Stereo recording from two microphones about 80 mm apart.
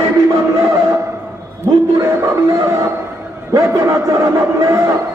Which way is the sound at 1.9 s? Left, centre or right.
Right.